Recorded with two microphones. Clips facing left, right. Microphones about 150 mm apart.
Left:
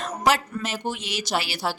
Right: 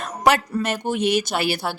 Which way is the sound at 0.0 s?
60° right (ahead or behind).